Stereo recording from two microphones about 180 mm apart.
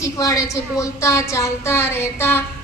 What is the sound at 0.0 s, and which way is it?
A woman's voice, 15° left (ahead or behind).